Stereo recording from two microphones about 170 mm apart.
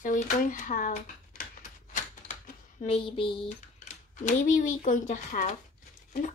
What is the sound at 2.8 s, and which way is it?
Child singing, 30° left (ahead or behind).